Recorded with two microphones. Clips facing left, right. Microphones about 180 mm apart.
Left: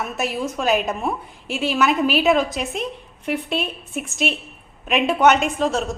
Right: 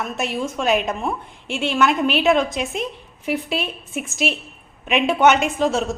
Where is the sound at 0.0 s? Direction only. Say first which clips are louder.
Even; 5° left (ahead or behind).